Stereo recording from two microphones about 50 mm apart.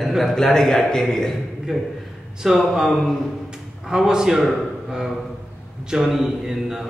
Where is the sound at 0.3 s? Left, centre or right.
Centre.